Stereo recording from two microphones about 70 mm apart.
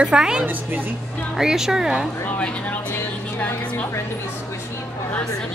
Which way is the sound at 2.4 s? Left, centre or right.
Left.